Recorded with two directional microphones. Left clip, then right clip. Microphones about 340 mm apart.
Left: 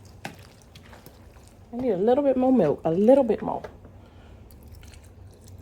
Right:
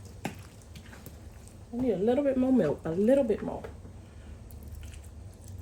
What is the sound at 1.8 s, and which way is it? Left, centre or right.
Speech, centre.